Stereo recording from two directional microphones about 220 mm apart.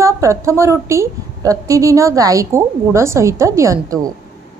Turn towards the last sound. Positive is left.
turn(degrees=-15)  # may be behind; listen again after turning